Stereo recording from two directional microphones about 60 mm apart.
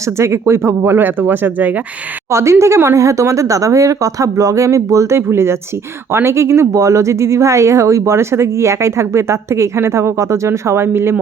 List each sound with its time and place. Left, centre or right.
0.0 s speech: right
0.9 s speech: right
2.3 s speech: right